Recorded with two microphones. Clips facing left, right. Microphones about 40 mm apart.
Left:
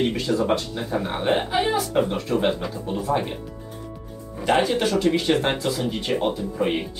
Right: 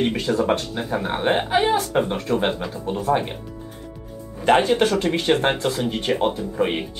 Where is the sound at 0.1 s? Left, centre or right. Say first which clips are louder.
Right 1 dB; right.